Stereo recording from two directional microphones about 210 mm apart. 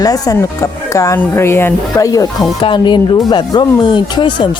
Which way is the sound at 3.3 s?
20° left (ahead or behind).